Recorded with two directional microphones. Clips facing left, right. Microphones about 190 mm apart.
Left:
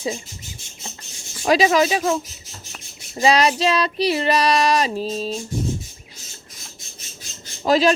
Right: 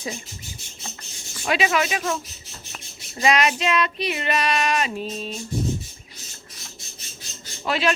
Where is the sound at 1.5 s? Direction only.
35° left (ahead or behind).